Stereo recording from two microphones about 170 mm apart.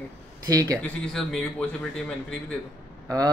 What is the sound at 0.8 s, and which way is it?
Speech, 5° left (ahead or behind).